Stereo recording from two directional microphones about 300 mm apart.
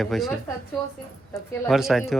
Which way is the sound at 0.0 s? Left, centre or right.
Centre.